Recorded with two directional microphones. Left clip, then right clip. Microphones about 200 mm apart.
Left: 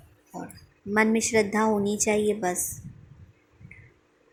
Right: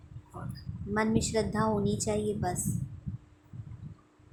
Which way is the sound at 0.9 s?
15° left (ahead or behind).